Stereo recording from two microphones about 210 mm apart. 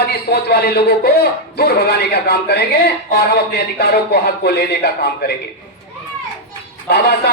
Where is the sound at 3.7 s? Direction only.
50° left (ahead or behind).